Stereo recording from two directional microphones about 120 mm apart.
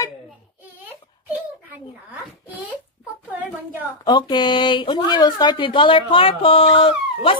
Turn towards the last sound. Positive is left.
turn(degrees=50)  # may be behind; listen again after turning